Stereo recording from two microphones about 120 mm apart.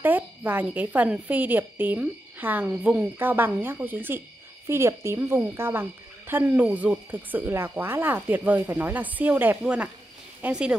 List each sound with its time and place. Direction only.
0.0 s speech: 15° right (ahead or behind)